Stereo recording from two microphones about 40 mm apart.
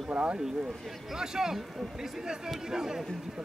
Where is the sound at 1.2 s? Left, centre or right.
Centre.